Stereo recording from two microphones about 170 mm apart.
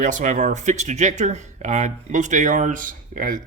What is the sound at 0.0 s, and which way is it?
Speech, 50° right (ahead or behind).